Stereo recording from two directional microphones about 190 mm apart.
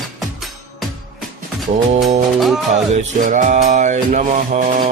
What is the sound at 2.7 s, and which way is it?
Music, 40° right (ahead or behind).